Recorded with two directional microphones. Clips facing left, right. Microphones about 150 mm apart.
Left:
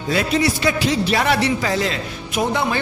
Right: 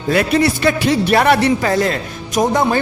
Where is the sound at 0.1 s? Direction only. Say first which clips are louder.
Right 4 dB; 60° right (ahead or behind).